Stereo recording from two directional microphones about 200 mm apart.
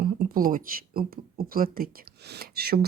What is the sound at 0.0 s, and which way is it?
Speech, 50° right (ahead or behind).